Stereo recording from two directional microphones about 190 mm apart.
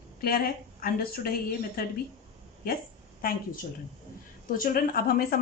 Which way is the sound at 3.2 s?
50° left (ahead or behind).